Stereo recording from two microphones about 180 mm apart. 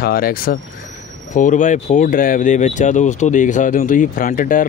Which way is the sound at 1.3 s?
45° left (ahead or behind).